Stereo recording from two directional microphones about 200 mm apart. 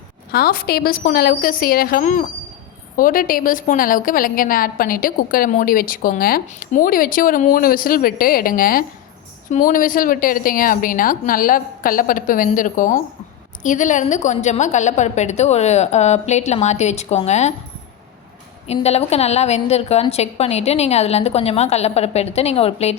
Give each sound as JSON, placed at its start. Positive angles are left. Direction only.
{"t": 0.3, "sound": "a woman's voice", "side_deg": 50}
{"t": 18.7, "sound": "a woman's voice", "side_deg": 30}